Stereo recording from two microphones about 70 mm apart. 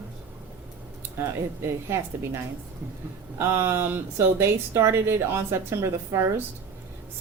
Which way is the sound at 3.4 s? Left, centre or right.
Right.